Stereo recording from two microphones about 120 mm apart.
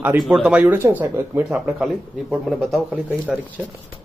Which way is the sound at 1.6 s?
5° right (ahead or behind).